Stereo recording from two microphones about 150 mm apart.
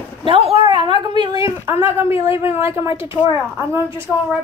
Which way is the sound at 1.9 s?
15° right (ahead or behind).